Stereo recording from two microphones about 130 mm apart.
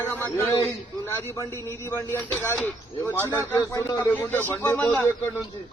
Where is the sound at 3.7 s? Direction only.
30° left (ahead or behind).